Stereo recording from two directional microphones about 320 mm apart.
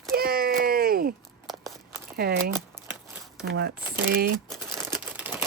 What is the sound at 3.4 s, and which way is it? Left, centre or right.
Speech, right.